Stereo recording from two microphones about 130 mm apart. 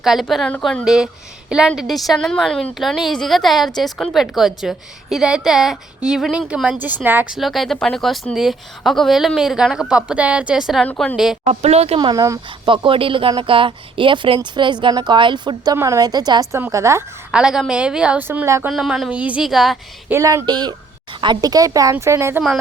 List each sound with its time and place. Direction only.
0.0 s a woman's voice: centre (ahead or behind)
7.3 s speech: centre (ahead or behind)
10.8 s speech: 10° left (ahead or behind)
11.4 s speech: 55° right (ahead or behind)
11.9 s speech: 30° right (ahead or behind)
12.6 s a woman's voice: 40° right (ahead or behind); by 17.0 s 25° right (ahead or behind)
17.3 s a woman's voice: 5° right (ahead or behind)
18.7 s speech: centre (ahead or behind)
20.1 s a woman's voice: 25° right (ahead or behind)